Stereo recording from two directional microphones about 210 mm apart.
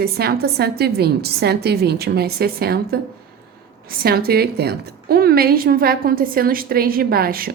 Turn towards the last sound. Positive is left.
turn(degrees=-45)  # may be behind; listen again after turning